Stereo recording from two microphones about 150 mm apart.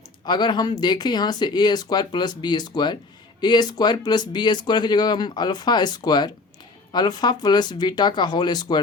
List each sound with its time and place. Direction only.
0.3 s speech: 30° left (ahead or behind)